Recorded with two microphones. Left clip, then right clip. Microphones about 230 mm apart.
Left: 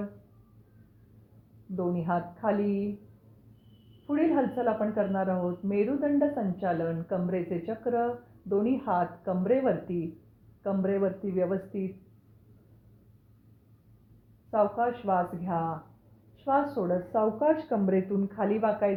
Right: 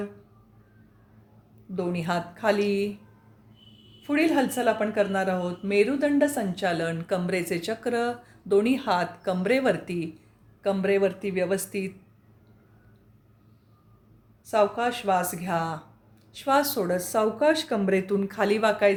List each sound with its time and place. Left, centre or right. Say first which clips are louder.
1.7 s a woman's voice: right 2 dB; right
4.0 s a woman's voice: right 3 dB; right
14.5 s a woman's voice: right 3 dB; right